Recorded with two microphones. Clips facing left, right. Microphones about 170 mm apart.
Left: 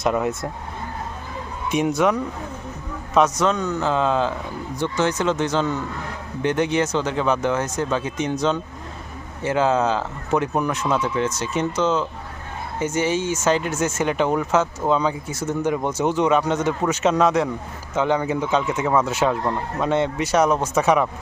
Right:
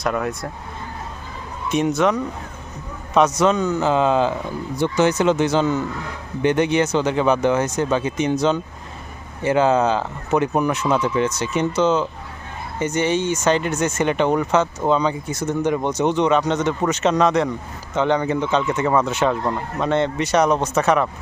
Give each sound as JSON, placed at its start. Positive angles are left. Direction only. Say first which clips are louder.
{"t": 0.0, "sound": "speech", "louder": "left 1 dB", "side_deg": 20}
{"t": 1.7, "sound": "speech", "louder": "right 1 dB", "side_deg": 10}